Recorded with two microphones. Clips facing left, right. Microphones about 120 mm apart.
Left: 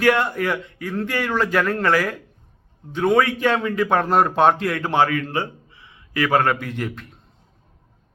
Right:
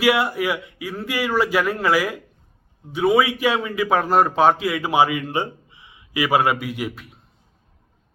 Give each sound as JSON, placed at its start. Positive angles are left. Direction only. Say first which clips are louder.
{"t": 0.0, "sound": "a man's voice", "louder": "even", "side_deg": -10}